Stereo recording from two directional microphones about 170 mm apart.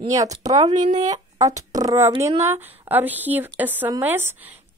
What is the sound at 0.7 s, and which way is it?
Speech, 45° right (ahead or behind).